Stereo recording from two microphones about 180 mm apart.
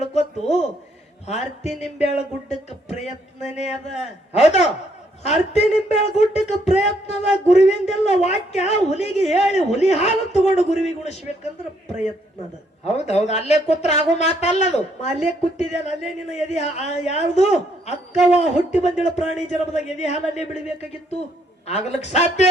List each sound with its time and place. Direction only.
0.1 s a sound: 40° left (ahead or behind)
1.8 s speech: 40° left (ahead or behind)
12.8 s speech: 35° left (ahead or behind)